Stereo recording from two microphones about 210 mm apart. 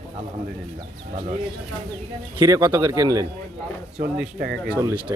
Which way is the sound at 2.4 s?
15° right (ahead or behind).